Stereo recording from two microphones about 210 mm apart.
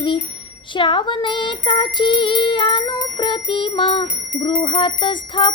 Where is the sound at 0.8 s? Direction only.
25° left (ahead or behind).